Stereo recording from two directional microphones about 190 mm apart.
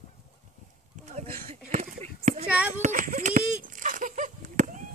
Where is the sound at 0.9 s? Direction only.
35° right (ahead or behind).